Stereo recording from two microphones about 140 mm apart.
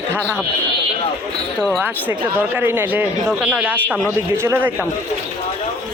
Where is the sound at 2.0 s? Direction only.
15° right (ahead or behind).